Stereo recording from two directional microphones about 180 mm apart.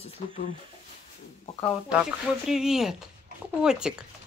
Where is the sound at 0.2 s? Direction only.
35° left (ahead or behind).